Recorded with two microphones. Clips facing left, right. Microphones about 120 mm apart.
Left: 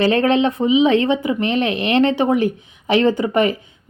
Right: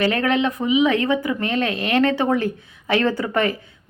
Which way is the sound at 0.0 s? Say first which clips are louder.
Left 4 dB; 25° left (ahead or behind).